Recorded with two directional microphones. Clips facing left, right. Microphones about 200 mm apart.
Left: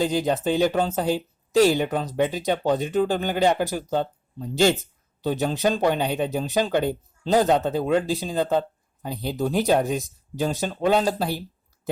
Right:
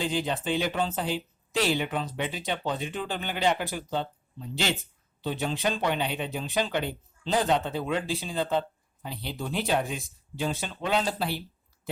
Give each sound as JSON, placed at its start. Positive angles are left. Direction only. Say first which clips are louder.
{"t": 0.0, "sound": "speech", "louder": "left 7 dB", "side_deg": 40}